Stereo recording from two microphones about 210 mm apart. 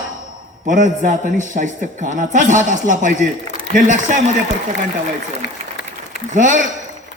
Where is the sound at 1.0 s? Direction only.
35° right (ahead or behind).